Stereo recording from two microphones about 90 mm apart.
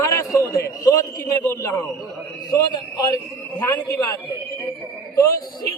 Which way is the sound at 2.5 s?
45° left (ahead or behind).